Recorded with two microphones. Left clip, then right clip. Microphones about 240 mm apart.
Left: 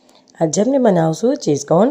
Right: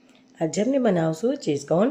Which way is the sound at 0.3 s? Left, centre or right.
Left.